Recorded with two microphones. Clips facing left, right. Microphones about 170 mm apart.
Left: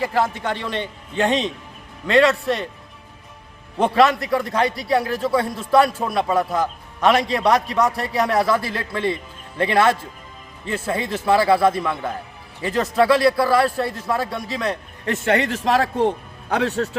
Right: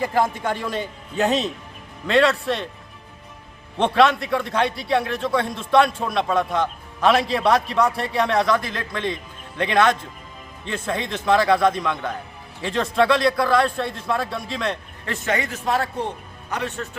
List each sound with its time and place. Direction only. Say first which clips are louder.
0.1 s a man's voice: even; 10° right (ahead or behind)
3.8 s a man's voice: left 1 dB; centre (ahead or behind)
15.0 s speech: left 5 dB; 50° left (ahead or behind); by 15.9 s 90° left
16.5 s speech: left 7 dB; 70° left (ahead or behind)